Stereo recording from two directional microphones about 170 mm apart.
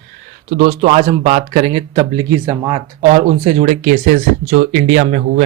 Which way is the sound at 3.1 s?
40° right (ahead or behind).